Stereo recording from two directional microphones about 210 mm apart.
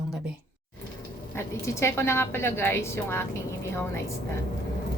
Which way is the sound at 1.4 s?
10° left (ahead or behind).